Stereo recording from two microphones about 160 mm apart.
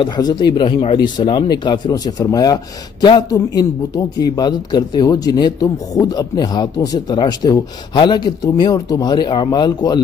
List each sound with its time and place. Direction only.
0.0 s a man's voice: 25° left (ahead or behind)